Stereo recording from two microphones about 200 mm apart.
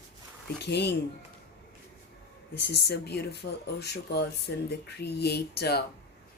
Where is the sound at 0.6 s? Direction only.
55° left (ahead or behind).